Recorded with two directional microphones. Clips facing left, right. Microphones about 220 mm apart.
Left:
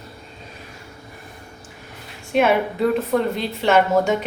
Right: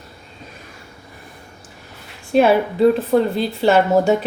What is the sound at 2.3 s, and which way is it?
A woman's voice, 35° right (ahead or behind).